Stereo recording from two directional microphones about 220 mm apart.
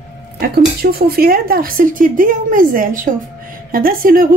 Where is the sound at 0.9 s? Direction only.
45° right (ahead or behind).